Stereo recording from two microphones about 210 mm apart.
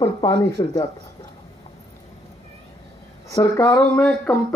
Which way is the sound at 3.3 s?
15° left (ahead or behind).